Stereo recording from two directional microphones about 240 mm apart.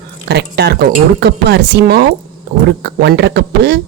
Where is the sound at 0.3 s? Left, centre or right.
Right.